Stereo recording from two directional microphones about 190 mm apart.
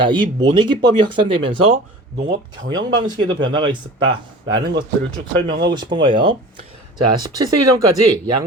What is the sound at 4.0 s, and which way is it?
Speech, 80° right.